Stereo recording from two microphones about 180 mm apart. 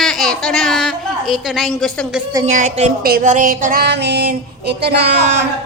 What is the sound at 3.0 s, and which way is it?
Child singing, 55° right (ahead or behind).